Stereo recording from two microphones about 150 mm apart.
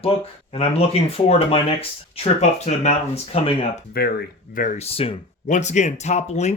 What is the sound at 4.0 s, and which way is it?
Speech, 90° left.